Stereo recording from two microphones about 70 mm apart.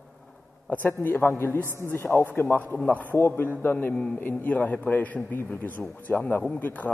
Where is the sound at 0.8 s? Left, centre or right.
Left.